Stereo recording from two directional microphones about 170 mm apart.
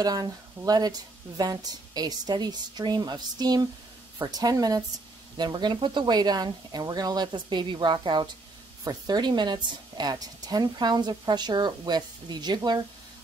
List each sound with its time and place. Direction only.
0.0 s a woman's voice: 20° right (ahead or behind)